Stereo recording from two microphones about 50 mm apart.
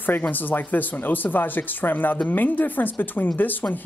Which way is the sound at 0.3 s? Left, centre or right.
Left.